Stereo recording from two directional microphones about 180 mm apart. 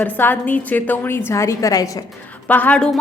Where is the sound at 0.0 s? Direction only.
10° left (ahead or behind).